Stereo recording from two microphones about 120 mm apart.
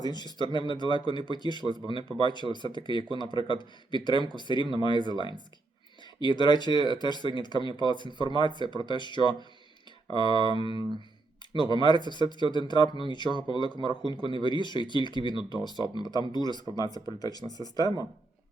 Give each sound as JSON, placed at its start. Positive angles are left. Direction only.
{"t": 0.0, "sound": "speech", "side_deg": 35}
{"t": 10.4, "sound": "a sound", "side_deg": -40}
{"t": 11.5, "sound": "speech", "side_deg": 40}